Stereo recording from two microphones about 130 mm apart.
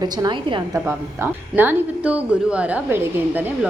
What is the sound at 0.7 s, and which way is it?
Speech, 15° right (ahead or behind).